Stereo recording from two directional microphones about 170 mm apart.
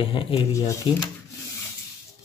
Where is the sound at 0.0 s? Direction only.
30° left (ahead or behind).